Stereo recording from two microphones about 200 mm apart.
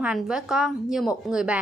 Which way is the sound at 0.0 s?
5° right (ahead or behind).